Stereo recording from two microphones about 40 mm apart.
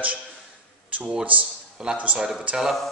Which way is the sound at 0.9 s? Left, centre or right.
Right.